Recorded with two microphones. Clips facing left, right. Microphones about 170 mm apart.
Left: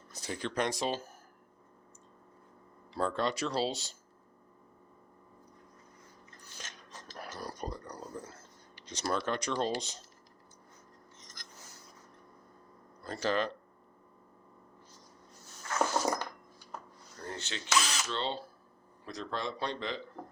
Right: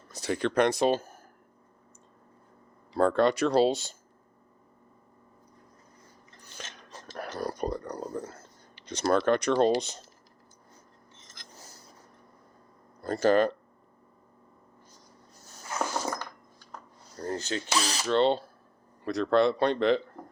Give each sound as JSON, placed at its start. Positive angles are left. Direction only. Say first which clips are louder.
{"t": 0.1, "sound": "speech", "louder": "right 9 dB", "side_deg": -75}
{"t": 2.9, "sound": "speech", "louder": "right 9 dB", "side_deg": -60}
{"t": 7.2, "sound": "speech", "louder": "right 9 dB", "side_deg": -60}
{"t": 13.0, "sound": "speech", "louder": "right 9 dB", "side_deg": -50}
{"t": 16.0, "sound": "coin", "louder": "left 2 dB", "side_deg": 10}
{"t": 17.2, "sound": "speech", "louder": "right 9 dB", "side_deg": -40}
{"t": 18.1, "sound": "speech", "louder": "right 17 dB", "side_deg": -60}